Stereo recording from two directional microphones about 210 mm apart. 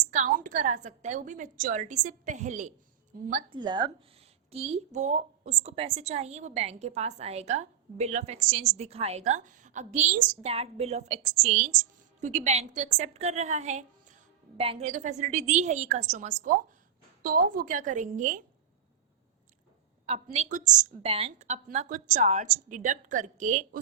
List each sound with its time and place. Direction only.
0.0 s a woman's voice: 35° right (ahead or behind)
3.5 s speech: 20° right (ahead or behind)
4.5 s a woman's voice: 30° right (ahead or behind)
20.1 s a woman's voice: 30° right (ahead or behind)